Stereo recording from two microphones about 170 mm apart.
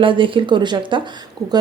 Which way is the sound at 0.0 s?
30° right (ahead or behind).